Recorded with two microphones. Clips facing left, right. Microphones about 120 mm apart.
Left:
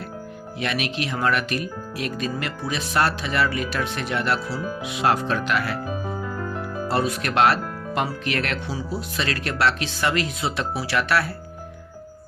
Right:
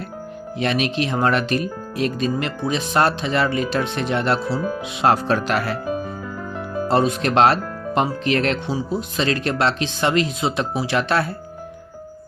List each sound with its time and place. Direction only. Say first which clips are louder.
0.6 s speech: right 5 dB; 30° right (ahead or behind)
6.8 s speech: right 6 dB; 25° right (ahead or behind)